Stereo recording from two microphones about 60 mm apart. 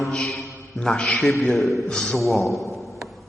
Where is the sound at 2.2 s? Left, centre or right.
Centre.